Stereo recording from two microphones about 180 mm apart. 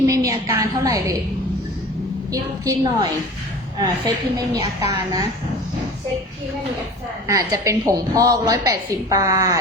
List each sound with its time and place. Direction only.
0.0 s a woman's voice: 20° right (ahead or behind)
2.3 s a woman's voice: 20° right (ahead or behind)
7.3 s a woman's voice: 15° right (ahead or behind)